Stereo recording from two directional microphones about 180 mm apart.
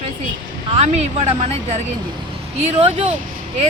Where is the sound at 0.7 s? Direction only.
35° right (ahead or behind).